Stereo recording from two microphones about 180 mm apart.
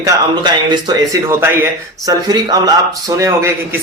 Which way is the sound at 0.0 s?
25° right (ahead or behind).